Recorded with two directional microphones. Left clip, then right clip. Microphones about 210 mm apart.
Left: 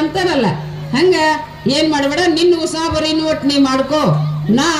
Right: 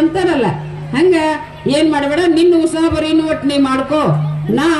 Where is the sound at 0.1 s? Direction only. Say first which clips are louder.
Right 1 dB; 45° right (ahead or behind).